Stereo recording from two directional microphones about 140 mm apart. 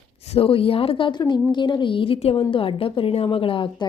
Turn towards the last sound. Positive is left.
turn(degrees=40)  # may be behind; listen again after turning